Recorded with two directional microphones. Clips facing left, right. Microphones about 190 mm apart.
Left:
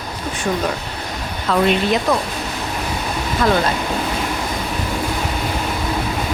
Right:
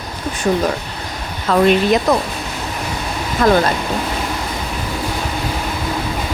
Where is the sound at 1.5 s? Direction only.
45° right (ahead or behind).